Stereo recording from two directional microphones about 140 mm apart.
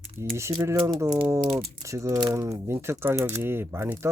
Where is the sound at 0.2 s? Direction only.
20° right (ahead or behind).